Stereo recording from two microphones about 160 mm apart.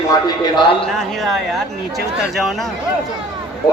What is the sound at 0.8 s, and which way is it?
Speech, centre (ahead or behind).